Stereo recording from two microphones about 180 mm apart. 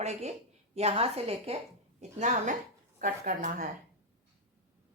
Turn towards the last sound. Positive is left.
turn(degrees=-45)  # may be behind; listen again after turning